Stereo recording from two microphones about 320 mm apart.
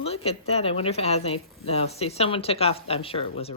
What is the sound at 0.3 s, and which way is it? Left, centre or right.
A woman's voice, centre.